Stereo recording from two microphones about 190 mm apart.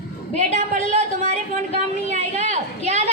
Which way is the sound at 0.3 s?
35° right (ahead or behind).